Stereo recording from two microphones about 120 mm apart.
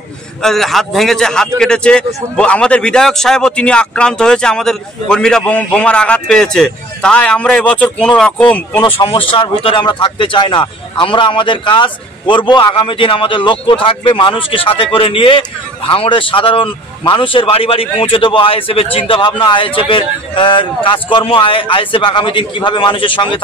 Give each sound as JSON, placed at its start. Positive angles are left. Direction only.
{"t": 0.4, "sound": "a man's voice", "side_deg": 5}
{"t": 8.8, "sound": "a man's voice", "side_deg": 45}